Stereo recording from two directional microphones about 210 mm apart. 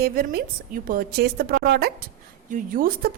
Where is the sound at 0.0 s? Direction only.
45° right (ahead or behind).